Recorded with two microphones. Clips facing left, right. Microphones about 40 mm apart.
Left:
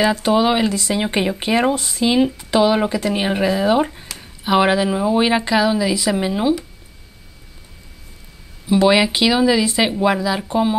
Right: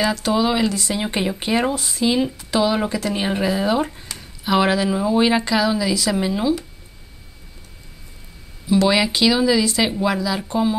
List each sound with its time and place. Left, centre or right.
0.0 s speech: left
1.6 s speech: left
8.6 s speech: left